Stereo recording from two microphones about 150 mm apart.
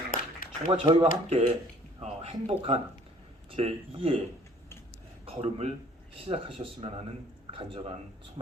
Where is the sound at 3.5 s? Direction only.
40° right (ahead or behind).